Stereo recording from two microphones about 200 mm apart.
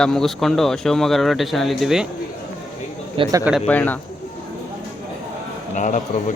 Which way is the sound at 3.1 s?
25° right (ahead or behind).